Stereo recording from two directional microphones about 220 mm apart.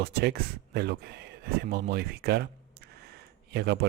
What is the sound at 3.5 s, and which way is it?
Speech, 50° right (ahead or behind).